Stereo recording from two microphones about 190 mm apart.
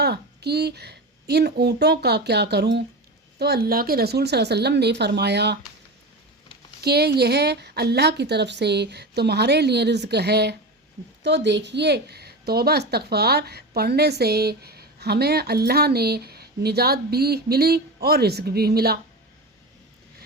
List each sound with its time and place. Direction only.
0.0 s a woman's voice: 60° right (ahead or behind)
6.8 s a woman's voice: 55° right (ahead or behind)